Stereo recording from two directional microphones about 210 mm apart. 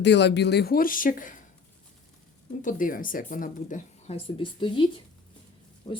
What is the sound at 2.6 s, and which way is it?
Speech, 40° left (ahead or behind).